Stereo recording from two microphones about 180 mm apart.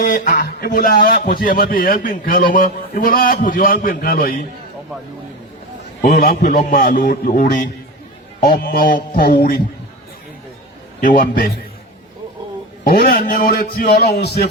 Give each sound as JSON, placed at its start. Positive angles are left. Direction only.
{"t": 0.0, "sound": "a man's voice", "side_deg": 50}
{"t": 6.0, "sound": "a man's voice", "side_deg": 50}
{"t": 11.0, "sound": "a man's voice", "side_deg": 50}
{"t": 12.8, "sound": "a man's voice", "side_deg": 55}